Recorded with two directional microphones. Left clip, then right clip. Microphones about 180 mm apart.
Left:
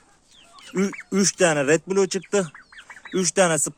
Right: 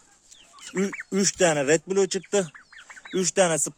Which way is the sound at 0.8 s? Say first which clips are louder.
Left 2 dB; 5° right (ahead or behind).